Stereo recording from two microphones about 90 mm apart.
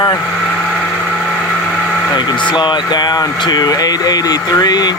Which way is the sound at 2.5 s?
55° left (ahead or behind).